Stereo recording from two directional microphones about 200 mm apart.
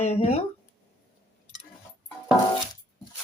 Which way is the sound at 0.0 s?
35° left (ahead or behind).